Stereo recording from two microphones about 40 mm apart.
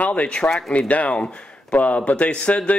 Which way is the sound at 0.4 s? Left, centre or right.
Left.